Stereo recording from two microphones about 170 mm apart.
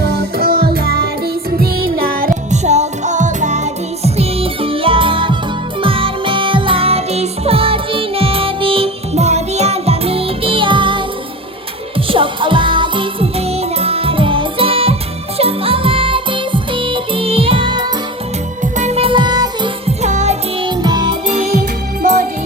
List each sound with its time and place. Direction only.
0.0 s music: 65° right (ahead or behind); by 11.0 s 30° right (ahead or behind)
12.0 s music: 30° right (ahead or behind)
18.6 s music: 45° right (ahead or behind); by 19.7 s 25° right (ahead or behind)
20.0 s music: 40° right (ahead or behind)
20.7 s music: 25° right (ahead or behind)